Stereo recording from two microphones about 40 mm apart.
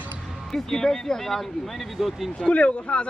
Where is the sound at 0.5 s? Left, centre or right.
Centre.